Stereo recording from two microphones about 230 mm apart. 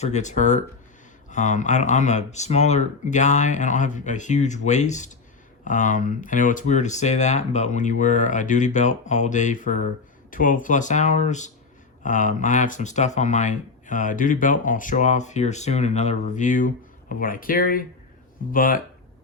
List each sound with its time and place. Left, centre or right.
0.0 s speech: left